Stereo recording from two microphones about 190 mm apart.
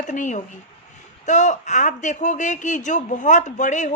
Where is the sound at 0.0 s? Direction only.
40° left (ahead or behind).